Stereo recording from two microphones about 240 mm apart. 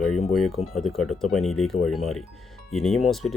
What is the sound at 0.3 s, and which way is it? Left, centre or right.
Speech, centre.